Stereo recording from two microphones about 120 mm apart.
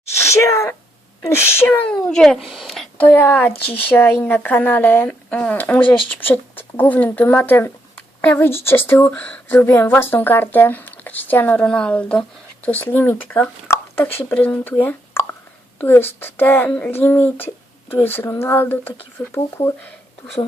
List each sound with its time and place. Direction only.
0.2 s speech: 25° left (ahead or behind); by 2.8 s centre (ahead or behind)
3.0 s speech: 15° left (ahead or behind)